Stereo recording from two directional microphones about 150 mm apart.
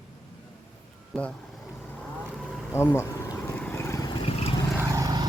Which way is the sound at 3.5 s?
15° left (ahead or behind).